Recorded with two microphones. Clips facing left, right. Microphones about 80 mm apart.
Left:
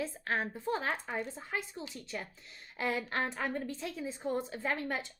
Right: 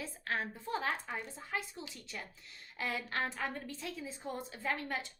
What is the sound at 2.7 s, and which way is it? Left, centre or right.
Speech, left.